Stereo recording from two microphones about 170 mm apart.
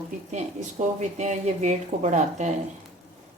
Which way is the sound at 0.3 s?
45° right (ahead or behind).